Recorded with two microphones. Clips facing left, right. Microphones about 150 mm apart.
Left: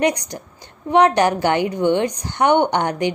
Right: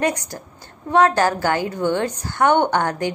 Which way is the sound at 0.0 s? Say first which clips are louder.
Left 3 dB; 15° left (ahead or behind).